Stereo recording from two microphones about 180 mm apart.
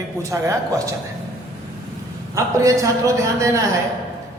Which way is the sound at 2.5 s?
15° right (ahead or behind).